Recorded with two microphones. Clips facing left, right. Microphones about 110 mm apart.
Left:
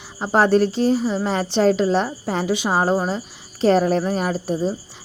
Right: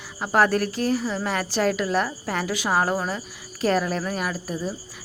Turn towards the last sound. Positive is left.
turn(degrees=30)  # may be behind; listen again after turning